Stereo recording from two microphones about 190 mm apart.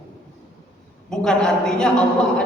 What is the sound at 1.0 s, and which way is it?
A woman's voice, 5° left (ahead or behind).